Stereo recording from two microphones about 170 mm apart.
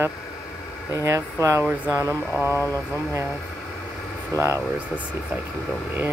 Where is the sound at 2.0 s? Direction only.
10° left (ahead or behind).